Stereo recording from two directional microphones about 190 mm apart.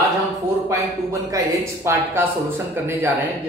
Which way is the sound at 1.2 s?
15° right (ahead or behind).